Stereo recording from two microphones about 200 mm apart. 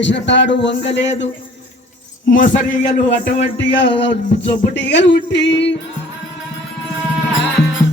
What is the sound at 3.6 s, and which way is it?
A man's voice, 60° left (ahead or behind).